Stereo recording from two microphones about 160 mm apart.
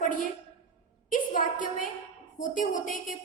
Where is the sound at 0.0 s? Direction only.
55° left (ahead or behind).